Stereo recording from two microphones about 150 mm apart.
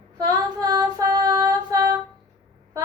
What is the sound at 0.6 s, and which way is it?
Female singing, 25° right (ahead or behind).